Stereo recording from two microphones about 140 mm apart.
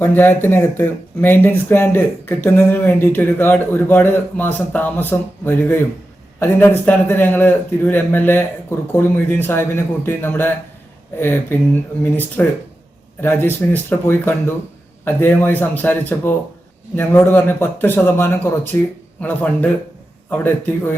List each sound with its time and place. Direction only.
0.0 s speech: 15° left (ahead or behind)